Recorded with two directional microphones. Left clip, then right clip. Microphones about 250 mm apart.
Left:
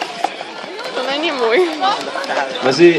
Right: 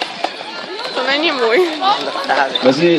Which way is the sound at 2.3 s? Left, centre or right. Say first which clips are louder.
Right 5 dB; right.